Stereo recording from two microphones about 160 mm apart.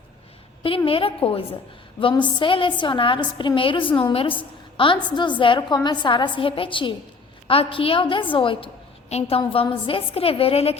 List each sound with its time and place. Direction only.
0.9 s a woman's voice: 35° left (ahead or behind)